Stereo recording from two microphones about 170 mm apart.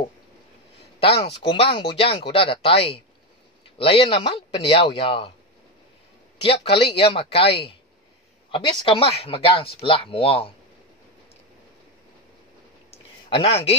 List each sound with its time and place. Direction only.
1.0 s speech: 35° left (ahead or behind)
6.4 s speech: 35° left (ahead or behind)
12.9 s a sound: 35° left (ahead or behind)